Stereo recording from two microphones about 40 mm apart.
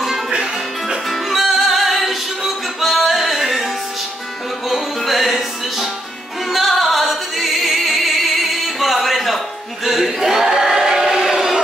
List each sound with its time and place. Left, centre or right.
0.3 s music: centre
1.1 s music: centre
4.6 s music: centre
9.8 s choir: centre